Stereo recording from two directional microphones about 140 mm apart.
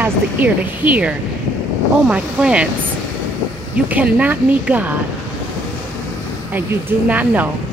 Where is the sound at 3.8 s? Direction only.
10° right (ahead or behind).